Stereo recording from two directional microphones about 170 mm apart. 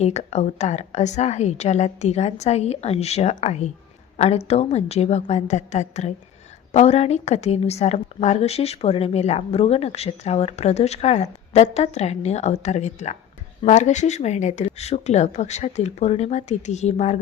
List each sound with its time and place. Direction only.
0.0 s a woman's voice: 40° left (ahead or behind)